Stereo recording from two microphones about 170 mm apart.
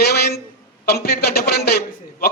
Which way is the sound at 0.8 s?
65° left (ahead or behind).